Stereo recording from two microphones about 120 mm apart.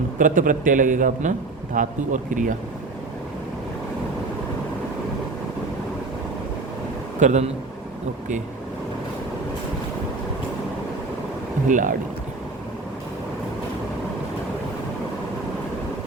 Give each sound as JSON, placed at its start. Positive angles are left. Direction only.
{"t": 0.2, "sound": "a man's voice", "side_deg": -90}
{"t": 7.2, "sound": "a man's voice", "side_deg": -80}
{"t": 11.7, "sound": "a man's voice", "side_deg": -90}